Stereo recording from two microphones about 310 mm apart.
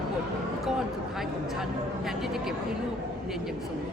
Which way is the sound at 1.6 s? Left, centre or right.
Centre.